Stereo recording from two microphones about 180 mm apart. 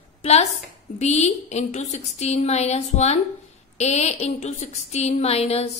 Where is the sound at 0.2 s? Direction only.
35° left (ahead or behind).